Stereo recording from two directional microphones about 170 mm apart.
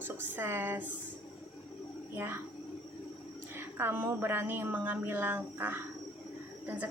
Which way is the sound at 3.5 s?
15° right (ahead or behind).